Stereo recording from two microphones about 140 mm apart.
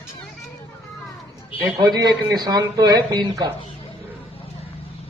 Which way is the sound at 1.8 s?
30° right (ahead or behind).